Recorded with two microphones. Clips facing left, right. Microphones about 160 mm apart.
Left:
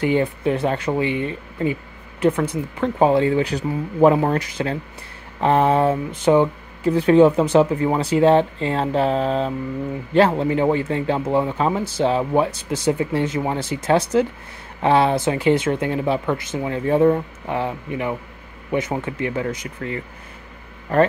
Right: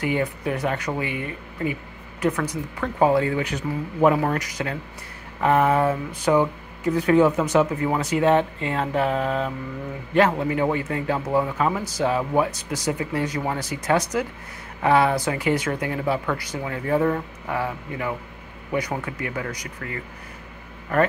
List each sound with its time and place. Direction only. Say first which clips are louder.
0.0 s speech: left 5 dB; 30° left (ahead or behind)